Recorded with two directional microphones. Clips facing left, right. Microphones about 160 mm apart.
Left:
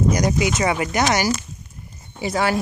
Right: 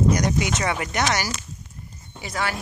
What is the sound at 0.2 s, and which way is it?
Speech, 10° left (ahead or behind).